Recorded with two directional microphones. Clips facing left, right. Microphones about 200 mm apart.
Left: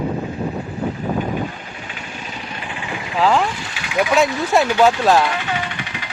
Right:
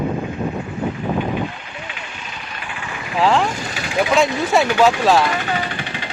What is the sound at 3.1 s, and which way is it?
Speech, centre (ahead or behind).